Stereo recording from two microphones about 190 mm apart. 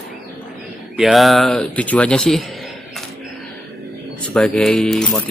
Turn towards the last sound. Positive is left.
turn(degrees=5)  # may be behind; listen again after turning